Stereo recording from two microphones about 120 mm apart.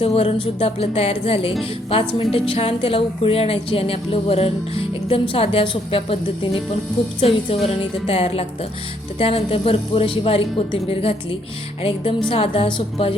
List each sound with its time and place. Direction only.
0.0 s a woman's voice: 55° left (ahead or behind)